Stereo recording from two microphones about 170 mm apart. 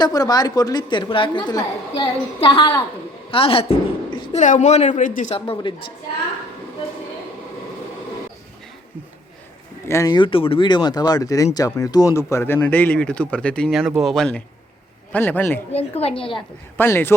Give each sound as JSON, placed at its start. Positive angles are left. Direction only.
{"t": 0.0, "sound": "a woman's voice", "side_deg": 25}
{"t": 5.3, "sound": "a woman's voice", "side_deg": 35}
{"t": 9.9, "sound": "speech", "side_deg": 20}
{"t": 15.7, "sound": "a woman's voice", "side_deg": 35}
{"t": 16.7, "sound": "speech", "side_deg": 10}